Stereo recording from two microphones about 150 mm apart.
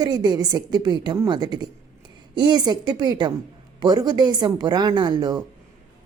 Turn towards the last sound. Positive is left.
turn(degrees=-25)  # may be behind; listen again after turning